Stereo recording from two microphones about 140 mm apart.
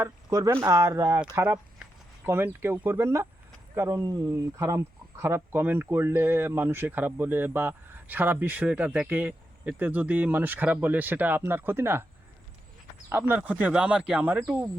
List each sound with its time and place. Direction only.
0.0 s speech: 25° right (ahead or behind)
2.2 s speech: 15° right (ahead or behind)
13.1 s speech: 15° right (ahead or behind)
14.4 s speech: 20° right (ahead or behind)